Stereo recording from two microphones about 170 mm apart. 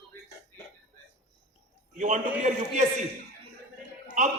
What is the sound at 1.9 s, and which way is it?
Speech, 45° right (ahead or behind).